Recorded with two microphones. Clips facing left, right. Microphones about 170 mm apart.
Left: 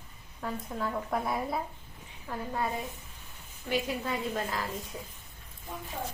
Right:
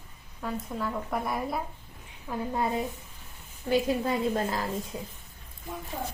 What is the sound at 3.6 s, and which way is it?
Speech, 35° right (ahead or behind).